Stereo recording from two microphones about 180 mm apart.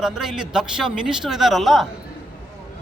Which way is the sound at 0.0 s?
5° right (ahead or behind).